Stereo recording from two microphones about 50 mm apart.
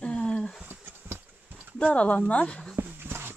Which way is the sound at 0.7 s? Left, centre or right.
Right.